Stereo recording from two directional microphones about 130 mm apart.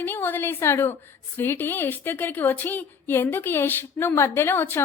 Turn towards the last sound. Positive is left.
turn(degrees=15)  # may be behind; listen again after turning